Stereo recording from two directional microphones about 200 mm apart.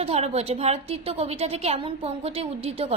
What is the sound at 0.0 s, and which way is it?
A woman's voice, 30° right (ahead or behind).